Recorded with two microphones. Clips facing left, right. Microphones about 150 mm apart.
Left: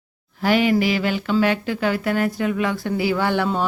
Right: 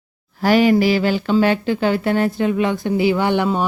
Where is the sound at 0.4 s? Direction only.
40° right (ahead or behind).